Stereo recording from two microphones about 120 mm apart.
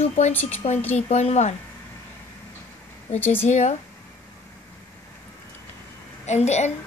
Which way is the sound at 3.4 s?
70° left (ahead or behind).